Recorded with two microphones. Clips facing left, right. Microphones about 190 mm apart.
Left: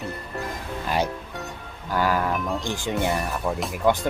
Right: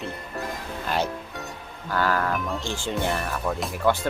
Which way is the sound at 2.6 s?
15° left (ahead or behind).